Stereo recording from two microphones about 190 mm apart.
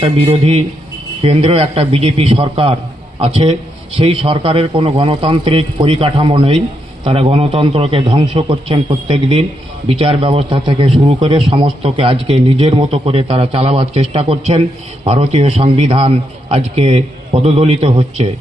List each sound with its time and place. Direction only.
0.0 s a man's voice: 30° right (ahead or behind)